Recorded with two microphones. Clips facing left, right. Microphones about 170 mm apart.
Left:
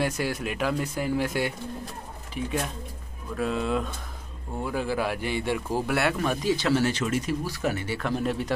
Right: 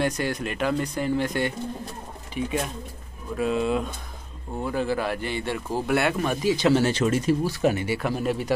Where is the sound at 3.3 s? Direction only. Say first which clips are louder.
Right 3 dB; 5° right (ahead or behind).